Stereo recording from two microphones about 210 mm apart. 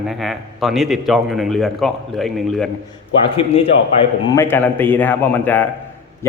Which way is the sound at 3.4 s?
25° left (ahead or behind).